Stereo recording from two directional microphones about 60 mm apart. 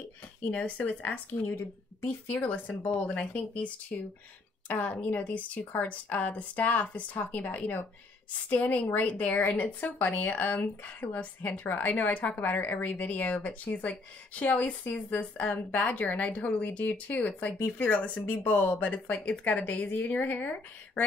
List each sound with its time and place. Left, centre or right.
0.5 s speech: left
2.2 s speech: left